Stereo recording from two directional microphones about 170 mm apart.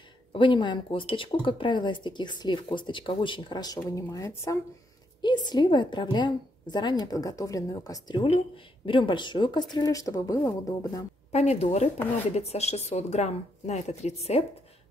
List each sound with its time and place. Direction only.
0.3 s speech: 30° left (ahead or behind)
11.3 s speech: 40° left (ahead or behind)